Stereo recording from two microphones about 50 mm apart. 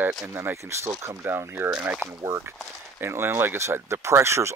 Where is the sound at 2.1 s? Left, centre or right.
Right.